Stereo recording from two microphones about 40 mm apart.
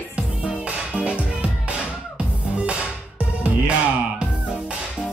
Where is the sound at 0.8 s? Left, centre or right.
Right.